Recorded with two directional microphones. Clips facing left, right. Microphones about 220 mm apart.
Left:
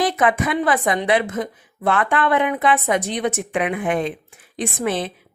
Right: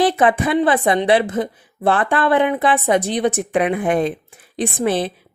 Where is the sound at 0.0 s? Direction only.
30° right (ahead or behind).